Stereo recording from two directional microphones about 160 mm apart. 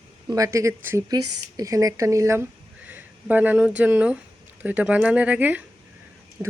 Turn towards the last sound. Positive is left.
turn(degrees=-10)  # may be behind; listen again after turning